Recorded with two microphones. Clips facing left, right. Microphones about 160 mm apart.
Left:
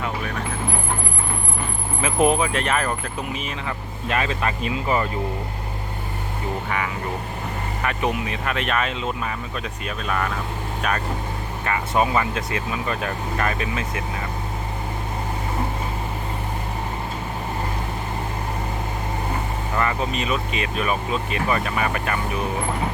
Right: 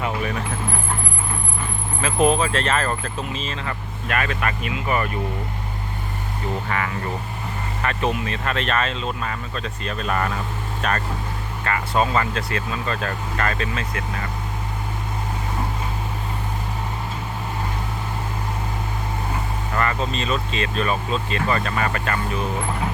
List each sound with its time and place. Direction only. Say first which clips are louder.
2.0 s speech: even; 20° left (ahead or behind)
4.2 s speech: even; 25° left (ahead or behind)
6.7 s speech: even; 10° left (ahead or behind)
10.1 s speech: right 1 dB; centre (ahead or behind); by 14.0 s 15° left (ahead or behind)
19.7 s speech: even; 15° left (ahead or behind)